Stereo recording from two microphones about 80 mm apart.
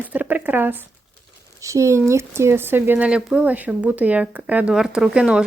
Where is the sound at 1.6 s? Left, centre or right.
Right.